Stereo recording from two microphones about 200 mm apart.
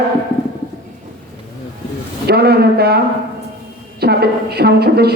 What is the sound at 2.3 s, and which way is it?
Speech, 50° right (ahead or behind).